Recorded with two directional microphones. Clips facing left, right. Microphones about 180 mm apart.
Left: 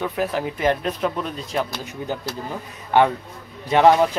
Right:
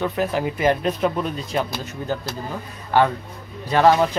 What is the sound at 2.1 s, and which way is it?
Speech, 15° left (ahead or behind).